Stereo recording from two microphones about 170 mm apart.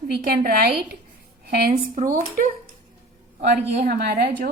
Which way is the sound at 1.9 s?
45° right (ahead or behind).